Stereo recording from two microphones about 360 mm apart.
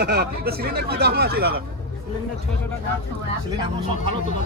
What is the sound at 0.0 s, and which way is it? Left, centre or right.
Speech, right.